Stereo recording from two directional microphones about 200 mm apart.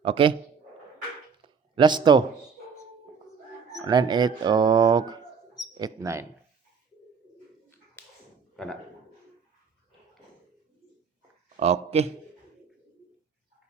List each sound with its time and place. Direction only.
0.0 s speech: 25° right (ahead or behind)
1.4 s a sound: 25° right (ahead or behind)
3.8 s speech: 20° right (ahead or behind)
8.6 s a man's voice: centre (ahead or behind)
11.5 s speech: 35° right (ahead or behind)